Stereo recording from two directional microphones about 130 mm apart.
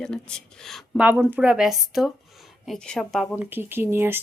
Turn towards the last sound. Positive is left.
turn(degrees=-15)  # may be behind; listen again after turning